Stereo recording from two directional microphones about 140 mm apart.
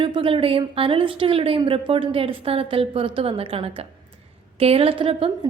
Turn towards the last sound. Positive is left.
turn(degrees=-40)  # may be behind; listen again after turning